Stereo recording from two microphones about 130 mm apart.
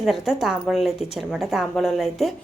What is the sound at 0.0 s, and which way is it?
A woman's voice, centre (ahead or behind).